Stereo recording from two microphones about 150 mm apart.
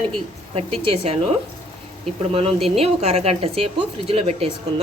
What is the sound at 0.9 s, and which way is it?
Speech, 40° right (ahead or behind).